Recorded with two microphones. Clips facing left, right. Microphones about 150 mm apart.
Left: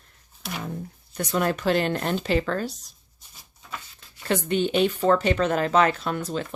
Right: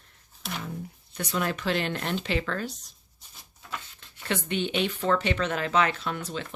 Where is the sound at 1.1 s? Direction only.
45° left (ahead or behind).